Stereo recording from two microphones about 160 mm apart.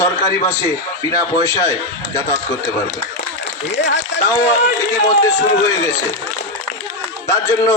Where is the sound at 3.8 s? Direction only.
90° left.